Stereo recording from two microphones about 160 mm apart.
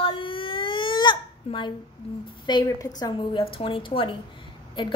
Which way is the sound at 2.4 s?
25° left (ahead or behind).